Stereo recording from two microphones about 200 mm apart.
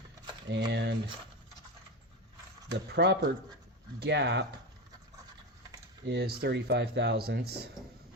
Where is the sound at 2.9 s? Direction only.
60° right (ahead or behind).